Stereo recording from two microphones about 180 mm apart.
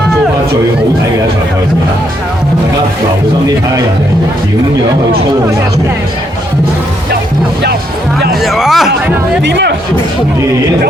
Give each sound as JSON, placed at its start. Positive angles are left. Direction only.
{"t": 8.4, "sound": "speech", "side_deg": 0}
{"t": 9.4, "sound": "speech", "side_deg": -75}